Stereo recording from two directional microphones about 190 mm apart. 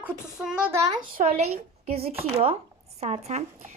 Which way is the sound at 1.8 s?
30° right (ahead or behind).